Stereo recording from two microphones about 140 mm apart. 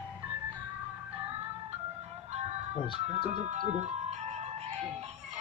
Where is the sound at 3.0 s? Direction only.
55° right (ahead or behind).